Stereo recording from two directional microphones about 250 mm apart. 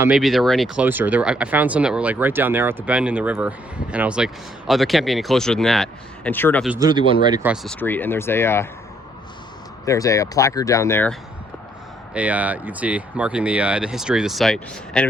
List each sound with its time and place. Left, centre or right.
0.0 s speech: centre
6.7 s speech: centre
7.4 s speech: centre
9.8 s speech: centre
12.1 s speech: centre